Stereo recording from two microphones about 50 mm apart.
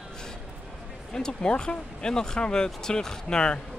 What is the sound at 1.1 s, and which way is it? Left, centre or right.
Speech, centre.